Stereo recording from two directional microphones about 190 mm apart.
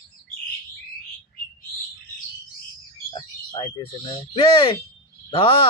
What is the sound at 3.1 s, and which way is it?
Speech, 25° left (ahead or behind).